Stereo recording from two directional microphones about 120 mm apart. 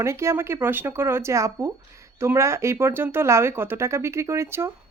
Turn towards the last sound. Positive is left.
turn(degrees=-20)  # may be behind; listen again after turning